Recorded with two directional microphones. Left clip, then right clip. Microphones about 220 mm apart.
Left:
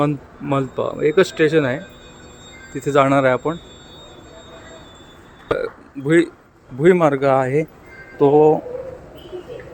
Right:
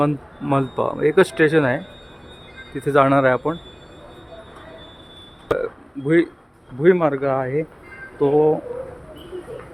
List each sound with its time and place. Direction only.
0.0 s speech: centre (ahead or behind)
5.5 s a man's voice: 5° left (ahead or behind)